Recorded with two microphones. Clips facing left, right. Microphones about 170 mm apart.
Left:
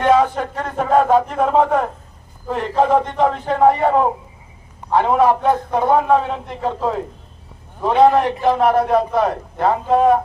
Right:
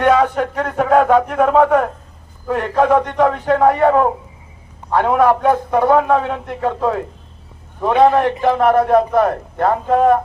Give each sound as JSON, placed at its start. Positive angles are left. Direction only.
{"t": 0.0, "sound": "a man's voice", "side_deg": -65}
{"t": 4.9, "sound": "a man's voice", "side_deg": -55}
{"t": 8.1, "sound": "a man's voice", "side_deg": -55}